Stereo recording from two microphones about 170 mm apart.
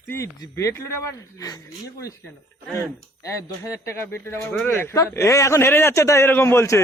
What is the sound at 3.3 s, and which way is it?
Speech, 15° left (ahead or behind).